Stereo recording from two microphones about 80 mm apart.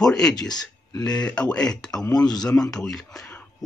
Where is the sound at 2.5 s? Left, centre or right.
Centre.